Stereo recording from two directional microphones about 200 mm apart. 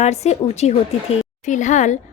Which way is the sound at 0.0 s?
35° left (ahead or behind).